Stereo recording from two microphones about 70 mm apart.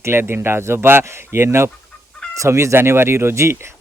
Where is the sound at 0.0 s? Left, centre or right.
Right.